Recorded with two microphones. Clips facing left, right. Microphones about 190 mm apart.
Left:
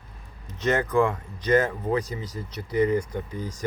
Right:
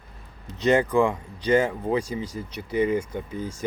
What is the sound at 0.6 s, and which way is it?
Speech, 15° right (ahead or behind).